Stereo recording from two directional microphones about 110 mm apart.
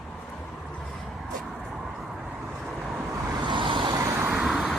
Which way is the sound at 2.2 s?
15° right (ahead or behind).